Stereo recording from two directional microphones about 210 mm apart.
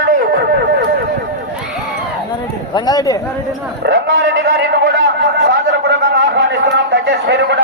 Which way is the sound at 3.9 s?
55° right (ahead or behind).